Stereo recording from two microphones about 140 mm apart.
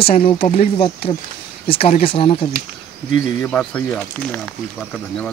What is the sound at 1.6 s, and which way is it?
Speech, 40° left (ahead or behind).